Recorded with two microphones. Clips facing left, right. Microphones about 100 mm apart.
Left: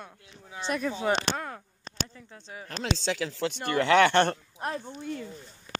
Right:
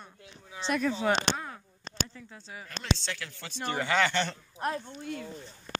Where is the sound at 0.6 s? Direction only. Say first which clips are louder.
Right 1 dB; 50° left (ahead or behind).